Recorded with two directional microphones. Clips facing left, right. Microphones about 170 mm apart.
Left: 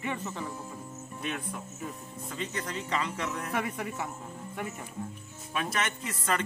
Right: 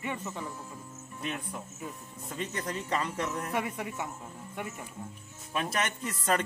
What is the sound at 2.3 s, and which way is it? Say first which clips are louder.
Speech: right 1 dB; 45° right (ahead or behind).